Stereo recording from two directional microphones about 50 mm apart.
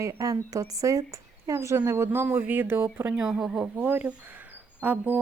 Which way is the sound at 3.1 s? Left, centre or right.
Centre.